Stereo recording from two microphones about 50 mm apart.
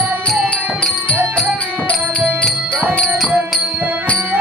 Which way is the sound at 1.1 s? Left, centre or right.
Right.